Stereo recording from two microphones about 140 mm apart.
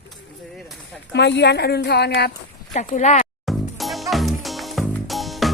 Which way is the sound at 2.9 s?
65° left (ahead or behind).